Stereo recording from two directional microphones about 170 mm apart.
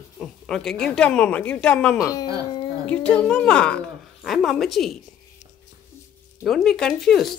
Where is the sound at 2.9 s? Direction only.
5° left (ahead or behind).